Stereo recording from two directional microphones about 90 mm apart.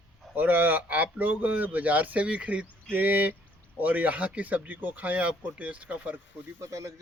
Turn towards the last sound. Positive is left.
turn(degrees=-35)  # may be behind; listen again after turning